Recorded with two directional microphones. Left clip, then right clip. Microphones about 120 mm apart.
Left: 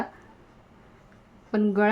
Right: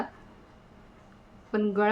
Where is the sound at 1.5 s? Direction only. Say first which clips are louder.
Left 2 dB; 65° left (ahead or behind).